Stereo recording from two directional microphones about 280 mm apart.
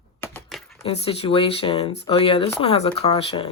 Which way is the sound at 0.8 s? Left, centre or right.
Left.